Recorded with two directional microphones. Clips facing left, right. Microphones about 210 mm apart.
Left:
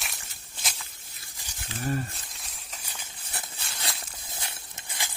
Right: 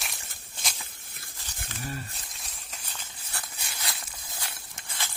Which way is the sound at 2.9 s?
20° left (ahead or behind).